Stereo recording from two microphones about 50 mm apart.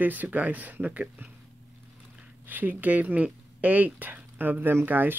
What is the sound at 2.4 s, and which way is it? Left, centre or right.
Speech, right.